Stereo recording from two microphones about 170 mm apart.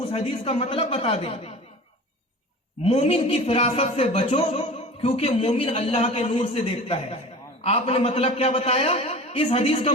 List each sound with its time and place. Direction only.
0.0 s a man's voice: 35° left (ahead or behind)
2.8 s a man's voice: 35° left (ahead or behind)